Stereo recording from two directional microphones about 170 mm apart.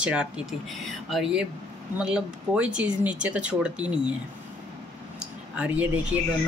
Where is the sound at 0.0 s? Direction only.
5° right (ahead or behind).